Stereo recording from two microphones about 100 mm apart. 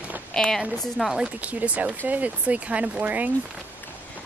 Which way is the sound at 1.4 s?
15° right (ahead or behind).